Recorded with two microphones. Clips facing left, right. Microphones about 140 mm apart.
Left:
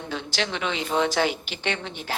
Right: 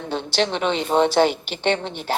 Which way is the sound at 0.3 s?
35° right (ahead or behind).